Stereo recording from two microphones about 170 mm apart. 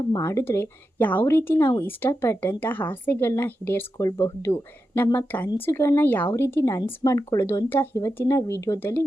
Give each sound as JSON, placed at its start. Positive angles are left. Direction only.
{"t": 0.0, "sound": "speech", "side_deg": 20}